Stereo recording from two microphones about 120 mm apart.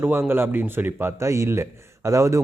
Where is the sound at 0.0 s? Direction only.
20° right (ahead or behind).